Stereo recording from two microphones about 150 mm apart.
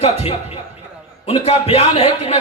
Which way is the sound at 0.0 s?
45° left (ahead or behind).